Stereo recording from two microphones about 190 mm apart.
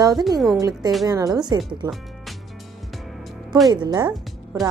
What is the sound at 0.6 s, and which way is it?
Speech, 20° right (ahead or behind).